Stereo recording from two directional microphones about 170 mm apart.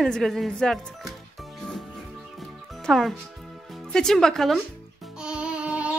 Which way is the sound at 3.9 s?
5° left (ahead or behind).